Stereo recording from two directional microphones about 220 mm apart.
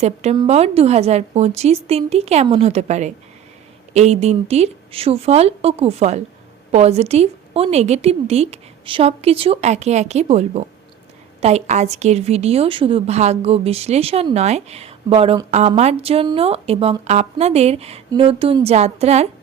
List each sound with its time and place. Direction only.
0.0 s a woman's voice: 30° right (ahead or behind)